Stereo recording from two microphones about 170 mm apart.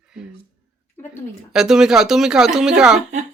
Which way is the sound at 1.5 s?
5° right (ahead or behind).